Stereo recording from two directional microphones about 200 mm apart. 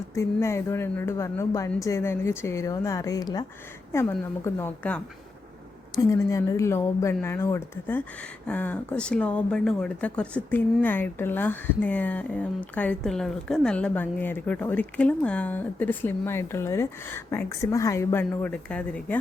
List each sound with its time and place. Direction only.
0.1 s speech: 15° left (ahead or behind)
4.4 s speech: 10° left (ahead or behind)
6.0 s speech: 15° left (ahead or behind)